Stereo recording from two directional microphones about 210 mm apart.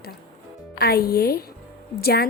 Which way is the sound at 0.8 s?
50° left (ahead or behind).